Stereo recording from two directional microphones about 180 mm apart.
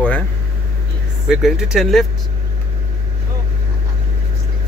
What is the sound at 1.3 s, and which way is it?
Speech, centre (ahead or behind).